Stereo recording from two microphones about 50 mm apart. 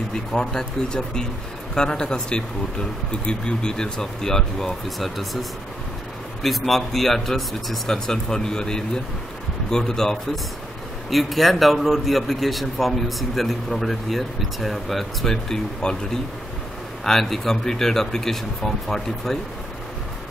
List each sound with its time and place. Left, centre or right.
0.1 s a man's voice: centre
15.8 s speech: centre
17.0 s speech: centre